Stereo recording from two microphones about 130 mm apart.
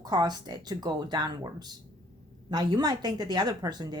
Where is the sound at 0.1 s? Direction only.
35° right (ahead or behind).